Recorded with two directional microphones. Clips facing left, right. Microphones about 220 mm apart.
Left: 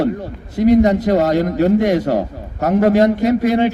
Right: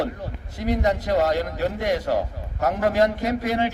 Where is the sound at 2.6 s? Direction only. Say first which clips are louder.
Left 8 dB; 25° left (ahead or behind).